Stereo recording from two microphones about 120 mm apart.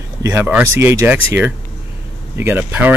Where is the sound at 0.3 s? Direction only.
15° right (ahead or behind).